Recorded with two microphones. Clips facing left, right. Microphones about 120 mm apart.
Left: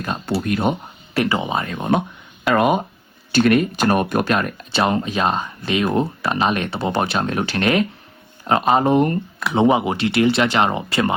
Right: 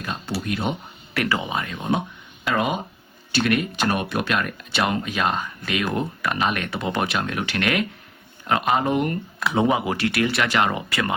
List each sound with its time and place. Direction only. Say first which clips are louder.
0.0 s speech: left 6 dB; 45° left (ahead or behind)
1.1 s speech: left 4 dB; 25° left (ahead or behind)
1.6 s speech: left 5 dB; 50° left (ahead or behind)
3.3 s speech: left 6 dB; 40° left (ahead or behind)
9.6 s speech: left 5 dB; 25° left (ahead or behind)